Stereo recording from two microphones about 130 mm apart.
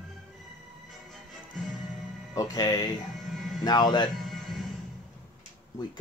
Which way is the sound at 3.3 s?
Centre (ahead or behind).